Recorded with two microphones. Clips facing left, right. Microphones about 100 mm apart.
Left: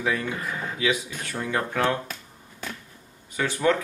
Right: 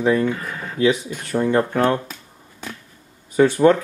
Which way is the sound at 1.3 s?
35° right (ahead or behind).